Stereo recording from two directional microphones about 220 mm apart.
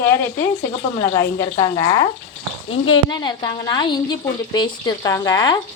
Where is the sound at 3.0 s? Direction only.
20° left (ahead or behind).